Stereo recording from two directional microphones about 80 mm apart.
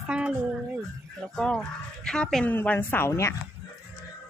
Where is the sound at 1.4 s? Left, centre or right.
Centre.